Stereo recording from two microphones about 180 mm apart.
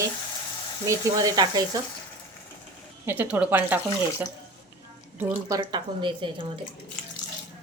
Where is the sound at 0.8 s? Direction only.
20° right (ahead or behind).